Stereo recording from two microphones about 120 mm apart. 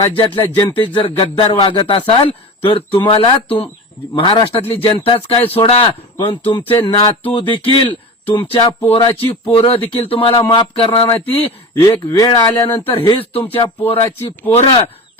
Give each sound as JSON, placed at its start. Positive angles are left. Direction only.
{"t": 0.2, "sound": "speech", "side_deg": 40}
{"t": 9.6, "sound": "speech", "side_deg": 50}
{"t": 10.2, "sound": "speech", "side_deg": 40}
{"t": 11.7, "sound": "speech", "side_deg": 30}
{"t": 12.9, "sound": "speech", "side_deg": 50}
{"t": 14.5, "sound": "speech", "side_deg": 60}